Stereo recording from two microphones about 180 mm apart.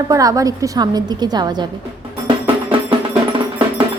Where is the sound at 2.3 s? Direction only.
30° right (ahead or behind).